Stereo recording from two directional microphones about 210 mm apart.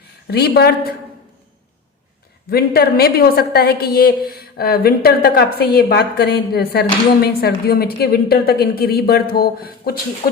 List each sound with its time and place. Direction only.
0.3 s a woman's voice: 50° left (ahead or behind)
2.5 s a woman's voice: 45° left (ahead or behind)